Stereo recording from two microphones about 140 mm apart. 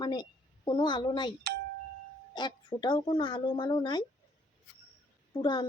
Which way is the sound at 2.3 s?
30° left (ahead or behind).